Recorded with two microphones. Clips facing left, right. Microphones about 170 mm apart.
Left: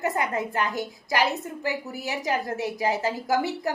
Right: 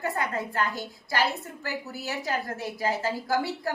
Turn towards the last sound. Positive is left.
turn(degrees=20)  # may be behind; listen again after turning